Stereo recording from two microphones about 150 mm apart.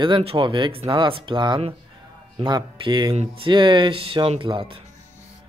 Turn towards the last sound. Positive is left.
turn(degrees=-35)  # may be behind; listen again after turning